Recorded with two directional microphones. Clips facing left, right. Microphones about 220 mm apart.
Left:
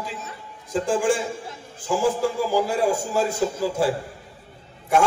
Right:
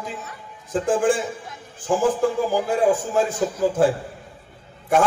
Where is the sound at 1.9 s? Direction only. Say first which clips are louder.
Right 2 dB; 50° right (ahead or behind).